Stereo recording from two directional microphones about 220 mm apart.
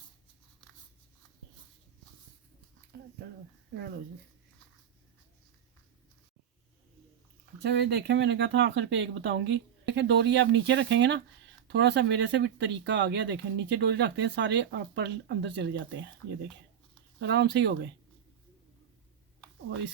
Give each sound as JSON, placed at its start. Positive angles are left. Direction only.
{"t": 7.6, "sound": "speech", "side_deg": -50}
{"t": 17.2, "sound": "speech", "side_deg": -50}